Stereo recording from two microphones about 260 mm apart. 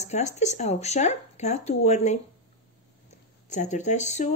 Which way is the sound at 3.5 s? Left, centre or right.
Left.